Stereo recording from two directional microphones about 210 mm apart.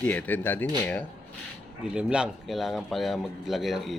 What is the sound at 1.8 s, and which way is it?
Speech, 5° right (ahead or behind).